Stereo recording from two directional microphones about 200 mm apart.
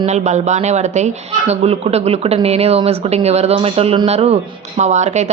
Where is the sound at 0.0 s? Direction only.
35° right (ahead or behind).